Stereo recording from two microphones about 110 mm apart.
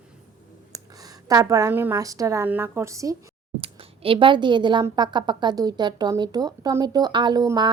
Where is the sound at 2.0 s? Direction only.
30° right (ahead or behind).